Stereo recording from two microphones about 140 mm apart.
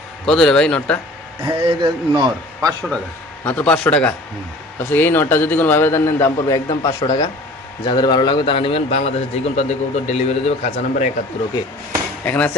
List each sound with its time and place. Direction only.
0.3 s a man's voice: 5° left (ahead or behind)
1.5 s a man's voice: 30° right (ahead or behind)
3.4 s a man's voice: 10° left (ahead or behind); by 11.1 s 55° left (ahead or behind)
12.2 s speech: 10° left (ahead or behind)